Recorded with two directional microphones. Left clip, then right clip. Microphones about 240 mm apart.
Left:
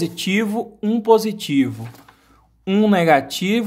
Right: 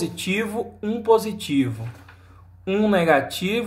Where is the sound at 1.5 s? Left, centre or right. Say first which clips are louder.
Left 3 dB; left.